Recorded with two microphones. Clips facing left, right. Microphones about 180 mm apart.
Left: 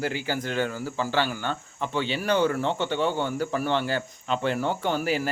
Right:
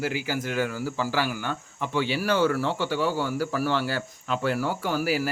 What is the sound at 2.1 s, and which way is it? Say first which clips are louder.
Speech: left 1 dB; 20° left (ahead or behind).